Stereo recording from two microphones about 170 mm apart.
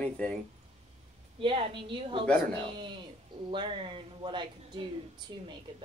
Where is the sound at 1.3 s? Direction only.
30° right (ahead or behind).